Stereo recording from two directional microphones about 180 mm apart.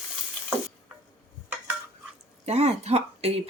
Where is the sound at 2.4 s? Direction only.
35° right (ahead or behind).